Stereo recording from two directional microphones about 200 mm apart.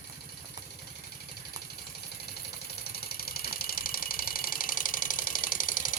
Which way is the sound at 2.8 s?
50° left (ahead or behind).